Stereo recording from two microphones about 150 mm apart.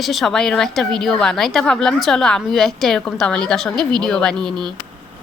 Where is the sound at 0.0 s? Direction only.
Centre (ahead or behind).